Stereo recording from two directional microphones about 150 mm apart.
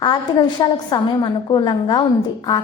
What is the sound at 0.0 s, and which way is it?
A woman's voice, 30° left (ahead or behind).